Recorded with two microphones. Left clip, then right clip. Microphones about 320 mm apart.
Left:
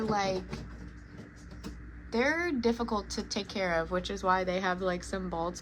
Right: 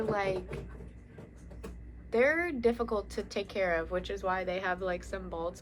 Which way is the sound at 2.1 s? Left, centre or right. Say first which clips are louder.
Right 2 dB; centre.